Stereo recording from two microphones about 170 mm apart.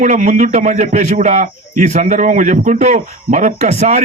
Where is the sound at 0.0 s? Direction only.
50° right (ahead or behind).